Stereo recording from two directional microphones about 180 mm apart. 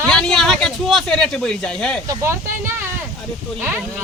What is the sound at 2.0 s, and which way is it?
Speech, 20° right (ahead or behind).